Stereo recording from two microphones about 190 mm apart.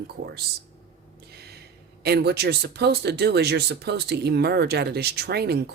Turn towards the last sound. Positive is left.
turn(degrees=-55)  # may be behind; listen again after turning